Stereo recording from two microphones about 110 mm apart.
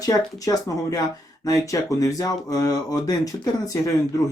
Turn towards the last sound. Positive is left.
turn(degrees=35)  # may be behind; listen again after turning